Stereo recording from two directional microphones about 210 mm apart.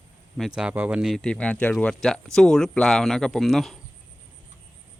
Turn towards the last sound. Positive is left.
turn(degrees=0)  # may be behind; listen again after turning